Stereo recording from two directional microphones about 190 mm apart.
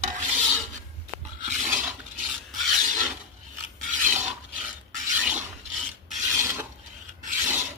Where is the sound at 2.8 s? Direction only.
40° right (ahead or behind).